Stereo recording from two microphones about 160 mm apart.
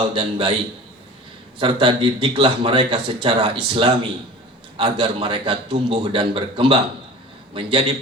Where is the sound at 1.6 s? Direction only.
30° right (ahead or behind).